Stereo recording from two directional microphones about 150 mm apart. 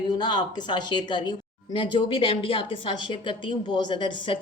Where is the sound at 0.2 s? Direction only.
30° left (ahead or behind).